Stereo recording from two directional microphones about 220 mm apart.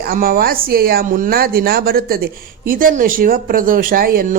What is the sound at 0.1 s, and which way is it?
Speech, 40° right (ahead or behind).